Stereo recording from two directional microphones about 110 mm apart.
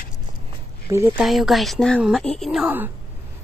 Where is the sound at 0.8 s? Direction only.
25° right (ahead or behind).